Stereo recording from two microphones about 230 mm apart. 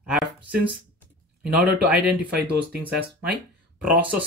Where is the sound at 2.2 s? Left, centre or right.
Centre.